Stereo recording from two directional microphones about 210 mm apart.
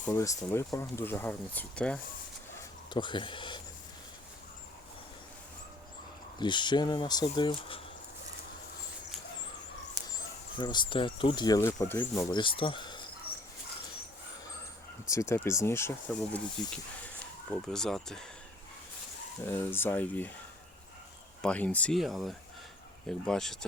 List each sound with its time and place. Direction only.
0.1 s speech: 15° left (ahead or behind)
2.6 s speech: 20° left (ahead or behind)
6.4 s speech: 20° left (ahead or behind)
10.6 s speech: 20° left (ahead or behind)
15.1 s speech: 15° left (ahead or behind)
19.5 s speech: 10° left (ahead or behind)
21.4 s speech: 5° left (ahead or behind)